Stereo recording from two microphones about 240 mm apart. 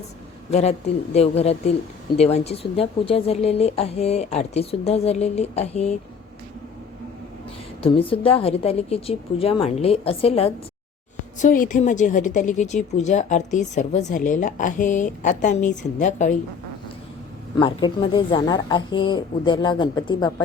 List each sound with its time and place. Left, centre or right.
0.5 s speech: left
7.8 s a woman's voice: left
17.6 s speech: centre